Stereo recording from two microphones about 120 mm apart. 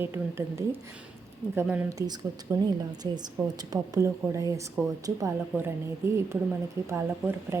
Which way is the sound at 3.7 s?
25° right (ahead or behind).